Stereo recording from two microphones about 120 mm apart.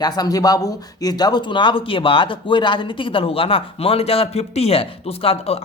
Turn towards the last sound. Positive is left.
turn(degrees=55)  # may be behind; listen again after turning